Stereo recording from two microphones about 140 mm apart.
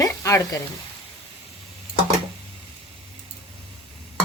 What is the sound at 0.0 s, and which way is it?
Frying, 20° left (ahead or behind).